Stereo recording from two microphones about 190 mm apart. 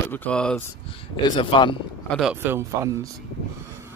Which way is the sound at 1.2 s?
25° left (ahead or behind).